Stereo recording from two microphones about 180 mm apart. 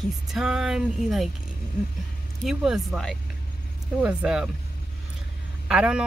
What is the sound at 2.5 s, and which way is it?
Speech, centre (ahead or behind).